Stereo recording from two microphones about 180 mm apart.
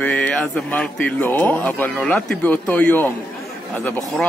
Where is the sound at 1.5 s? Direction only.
10° left (ahead or behind).